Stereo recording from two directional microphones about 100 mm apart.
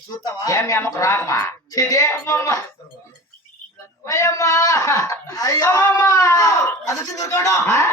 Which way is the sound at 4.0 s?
30° left (ahead or behind).